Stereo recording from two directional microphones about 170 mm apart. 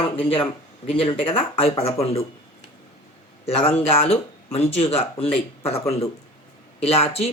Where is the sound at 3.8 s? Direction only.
35° left (ahead or behind).